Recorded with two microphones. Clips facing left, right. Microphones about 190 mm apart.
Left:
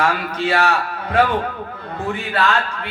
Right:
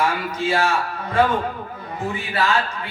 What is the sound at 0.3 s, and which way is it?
Speech, 65° left (ahead or behind).